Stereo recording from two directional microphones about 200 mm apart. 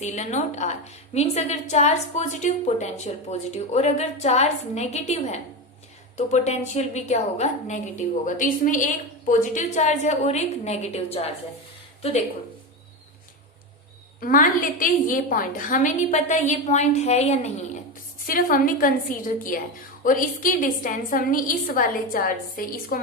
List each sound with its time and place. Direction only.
0.0 s a woman's voice: 35° left (ahead or behind)
14.2 s a woman's voice: 45° left (ahead or behind)
18.3 s a woman's voice: 45° left (ahead or behind)